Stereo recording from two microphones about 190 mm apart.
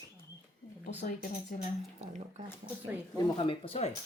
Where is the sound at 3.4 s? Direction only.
30° left (ahead or behind).